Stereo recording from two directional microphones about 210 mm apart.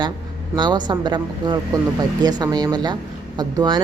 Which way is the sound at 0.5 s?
20° right (ahead or behind).